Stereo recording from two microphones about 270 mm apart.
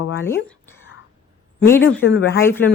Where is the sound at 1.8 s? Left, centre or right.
Left.